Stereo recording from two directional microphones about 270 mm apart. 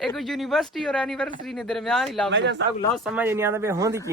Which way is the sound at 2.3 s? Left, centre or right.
Right.